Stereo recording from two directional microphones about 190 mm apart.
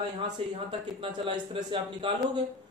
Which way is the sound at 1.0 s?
30° right (ahead or behind).